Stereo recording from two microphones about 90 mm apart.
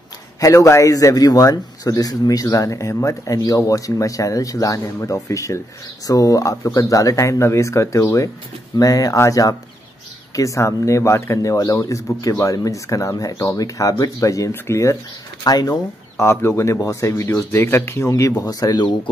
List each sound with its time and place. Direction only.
0.4 s a man's voice: 35° left (ahead or behind)
15.4 s speech: 45° left (ahead or behind)
16.2 s a man's voice: 30° left (ahead or behind); by 18.9 s 45° left (ahead or behind)